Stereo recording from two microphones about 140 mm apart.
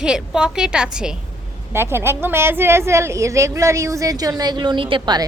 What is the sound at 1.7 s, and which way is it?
A woman's voice, 15° right (ahead or behind).